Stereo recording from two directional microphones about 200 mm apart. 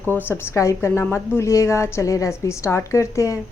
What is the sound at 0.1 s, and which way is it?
Speech, 10° left (ahead or behind).